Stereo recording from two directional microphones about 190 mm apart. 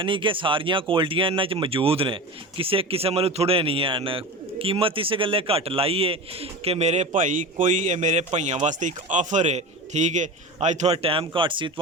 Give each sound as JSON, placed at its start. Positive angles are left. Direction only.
{"t": 0.0, "sound": "speech", "side_deg": -25}